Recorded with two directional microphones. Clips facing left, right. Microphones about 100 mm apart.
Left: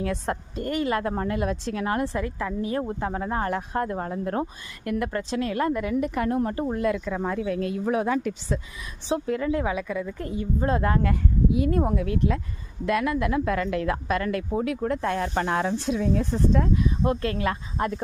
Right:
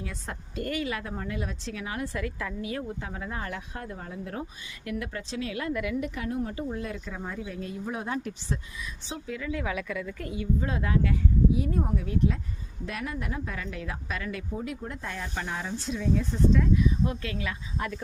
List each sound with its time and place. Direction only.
0.0 s speech: 65° left (ahead or behind)
0.8 s speech: 45° left (ahead or behind)
2.1 s a woman's voice: 30° left (ahead or behind)
2.8 s speech: 45° left (ahead or behind); by 8.6 s 90° left
9.0 s speech: 55° left (ahead or behind)
9.6 s speech: 25° left (ahead or behind)